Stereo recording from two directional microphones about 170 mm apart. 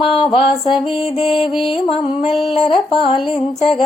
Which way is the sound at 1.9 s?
35° left (ahead or behind).